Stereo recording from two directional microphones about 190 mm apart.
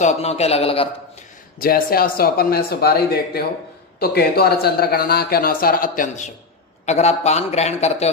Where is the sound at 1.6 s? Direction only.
50° left (ahead or behind).